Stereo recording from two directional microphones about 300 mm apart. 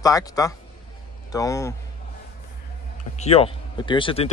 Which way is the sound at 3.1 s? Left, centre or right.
Centre.